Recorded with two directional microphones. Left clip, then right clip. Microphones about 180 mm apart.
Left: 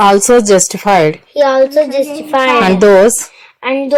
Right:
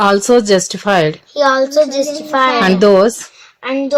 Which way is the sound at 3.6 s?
20° left (ahead or behind).